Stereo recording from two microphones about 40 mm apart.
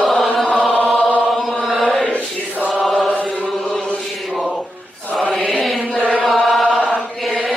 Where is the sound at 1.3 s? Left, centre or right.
Centre.